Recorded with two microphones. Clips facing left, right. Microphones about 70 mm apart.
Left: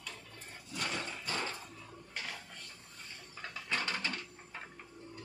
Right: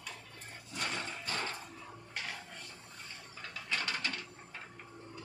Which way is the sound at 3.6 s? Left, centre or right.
Left.